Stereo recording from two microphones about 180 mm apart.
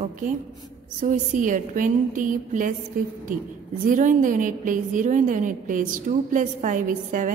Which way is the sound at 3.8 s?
45° right (ahead or behind).